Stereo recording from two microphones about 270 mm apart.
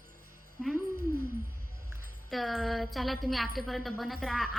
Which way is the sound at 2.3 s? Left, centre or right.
Centre.